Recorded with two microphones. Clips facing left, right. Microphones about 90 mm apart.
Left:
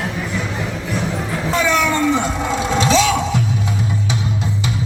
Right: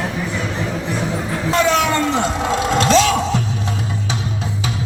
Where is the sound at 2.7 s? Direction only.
50° right (ahead or behind).